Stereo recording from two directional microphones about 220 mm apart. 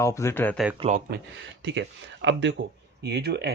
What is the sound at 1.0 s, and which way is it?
Speech, 50° right (ahead or behind).